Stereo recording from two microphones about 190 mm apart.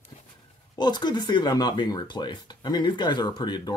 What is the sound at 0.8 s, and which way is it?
Speech, 20° left (ahead or behind).